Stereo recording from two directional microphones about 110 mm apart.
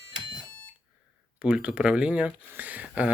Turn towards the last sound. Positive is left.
turn(degrees=-10)  # may be behind; listen again after turning